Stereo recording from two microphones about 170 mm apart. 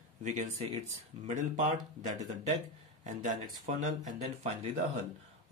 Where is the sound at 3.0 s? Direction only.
50° right (ahead or behind).